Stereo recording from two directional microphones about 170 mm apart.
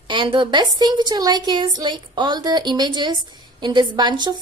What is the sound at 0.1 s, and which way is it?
A woman's voice, 30° right (ahead or behind).